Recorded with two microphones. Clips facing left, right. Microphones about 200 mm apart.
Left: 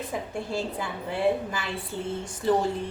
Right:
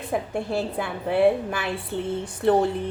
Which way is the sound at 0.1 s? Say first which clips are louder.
Right 9 dB; 60° right (ahead or behind).